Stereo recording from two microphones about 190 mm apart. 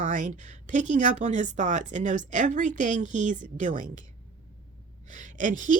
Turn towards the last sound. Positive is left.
turn(degrees=-40)  # may be behind; listen again after turning